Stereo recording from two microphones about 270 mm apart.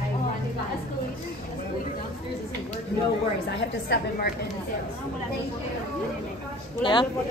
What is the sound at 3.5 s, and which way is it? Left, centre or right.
Speech, left.